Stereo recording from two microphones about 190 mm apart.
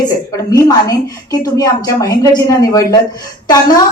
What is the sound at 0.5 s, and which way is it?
A woman's voice, 20° left (ahead or behind).